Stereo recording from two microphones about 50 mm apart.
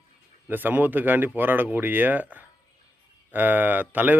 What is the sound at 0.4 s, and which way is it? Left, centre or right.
Speech, right.